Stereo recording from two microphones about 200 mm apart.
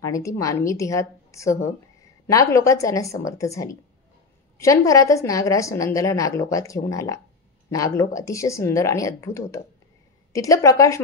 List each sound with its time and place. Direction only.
0.0 s a woman's voice: 15° left (ahead or behind)